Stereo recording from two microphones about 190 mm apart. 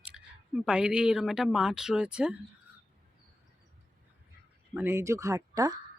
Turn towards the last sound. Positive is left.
turn(degrees=-15)  # may be behind; listen again after turning